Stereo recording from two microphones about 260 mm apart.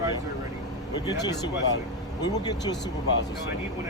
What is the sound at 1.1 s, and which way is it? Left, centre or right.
Speech, centre.